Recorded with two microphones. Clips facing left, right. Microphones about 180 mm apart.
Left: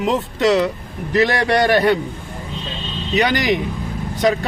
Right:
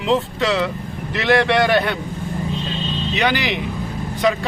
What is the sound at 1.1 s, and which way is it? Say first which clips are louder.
Speech: even; 40° left (ahead or behind).